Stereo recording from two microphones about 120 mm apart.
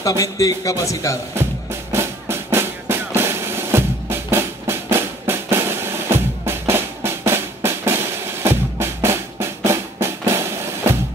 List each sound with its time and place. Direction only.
0.0 s speech: 30° left (ahead or behind)
1.3 s drum: 20° right (ahead or behind)